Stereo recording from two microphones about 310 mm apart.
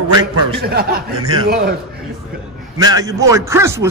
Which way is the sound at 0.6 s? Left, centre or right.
Right.